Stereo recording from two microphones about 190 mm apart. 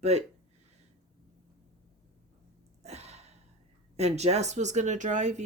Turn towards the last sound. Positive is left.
turn(degrees=-40)  # may be behind; listen again after turning